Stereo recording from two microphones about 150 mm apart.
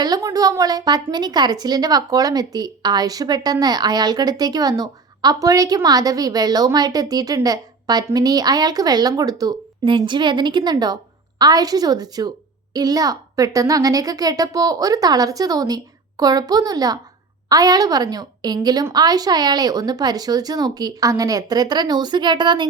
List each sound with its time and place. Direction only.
0.0 s a woman's voice: 25° right (ahead or behind)